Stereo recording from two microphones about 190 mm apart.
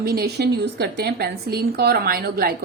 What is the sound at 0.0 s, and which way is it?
A woman's voice, 55° right (ahead or behind).